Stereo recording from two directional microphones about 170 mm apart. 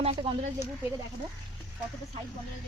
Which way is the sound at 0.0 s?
35° right (ahead or behind).